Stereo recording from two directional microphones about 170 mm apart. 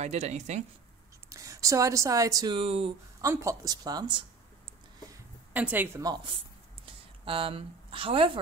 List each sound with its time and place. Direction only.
0.0 s speech: 40° right (ahead or behind)
1.3 s speech: 20° right (ahead or behind)
3.2 s speech: 20° right (ahead or behind)
5.5 s a woman's voice: 10° right (ahead or behind)
6.0 s speech: 25° right (ahead or behind)